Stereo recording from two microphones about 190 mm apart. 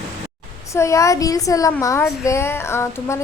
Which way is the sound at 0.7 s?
15° left (ahead or behind).